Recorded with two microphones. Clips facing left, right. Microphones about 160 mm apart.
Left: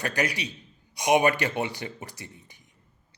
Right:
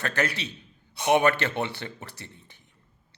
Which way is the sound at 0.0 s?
15° left (ahead or behind).